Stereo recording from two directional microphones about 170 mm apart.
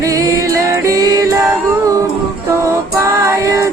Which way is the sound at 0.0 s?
20° right (ahead or behind).